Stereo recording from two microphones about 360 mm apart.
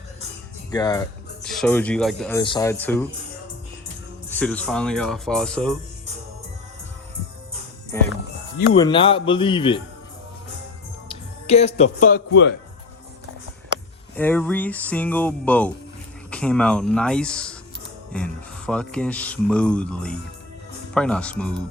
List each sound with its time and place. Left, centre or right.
0.7 s music: centre
1.5 s speech: centre
4.3 s speech: centre
7.9 s speech: centre
11.1 s speech: centre
14.2 s speech: centre